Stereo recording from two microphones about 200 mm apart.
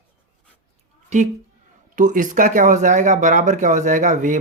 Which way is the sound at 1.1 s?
35° right (ahead or behind).